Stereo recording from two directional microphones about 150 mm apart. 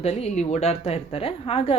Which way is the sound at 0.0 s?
45° left (ahead or behind).